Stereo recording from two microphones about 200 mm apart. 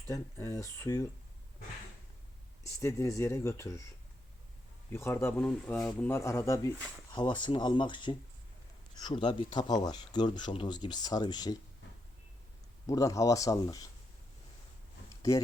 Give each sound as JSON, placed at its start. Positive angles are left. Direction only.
{"t": 0.1, "sound": "speech", "side_deg": 15}
{"t": 2.8, "sound": "speech", "side_deg": 15}
{"t": 4.9, "sound": "speech", "side_deg": 10}
{"t": 12.9, "sound": "speech", "side_deg": 15}